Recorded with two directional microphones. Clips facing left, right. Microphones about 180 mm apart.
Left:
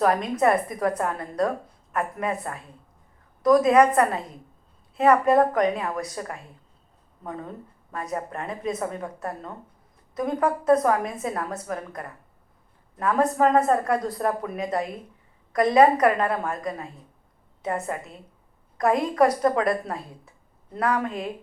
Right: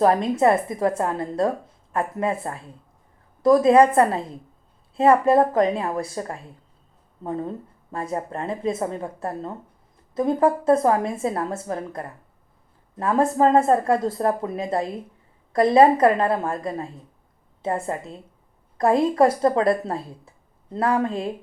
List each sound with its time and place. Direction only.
0.0 s a woman's voice: 30° right (ahead or behind)